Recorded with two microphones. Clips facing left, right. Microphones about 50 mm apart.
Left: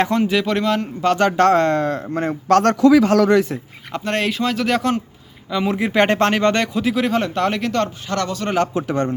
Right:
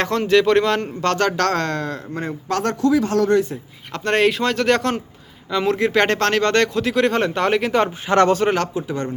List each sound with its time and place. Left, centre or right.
0.0 s speech: centre
1.4 s a man's voice: left
3.0 s speech: left
4.0 s speech: centre
8.2 s speech: right
8.7 s a man's voice: left